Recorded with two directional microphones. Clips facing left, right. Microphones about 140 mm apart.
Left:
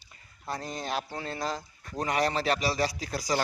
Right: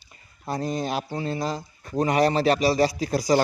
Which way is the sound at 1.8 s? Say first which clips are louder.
Right 8 dB; 25° right (ahead or behind).